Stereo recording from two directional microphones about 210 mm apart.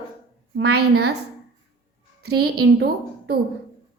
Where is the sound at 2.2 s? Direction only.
50° right (ahead or behind).